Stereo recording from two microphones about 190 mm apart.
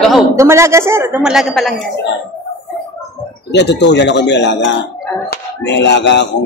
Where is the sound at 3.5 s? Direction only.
65° left (ahead or behind).